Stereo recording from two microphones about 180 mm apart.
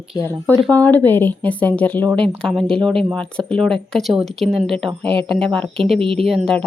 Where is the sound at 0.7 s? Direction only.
10° left (ahead or behind).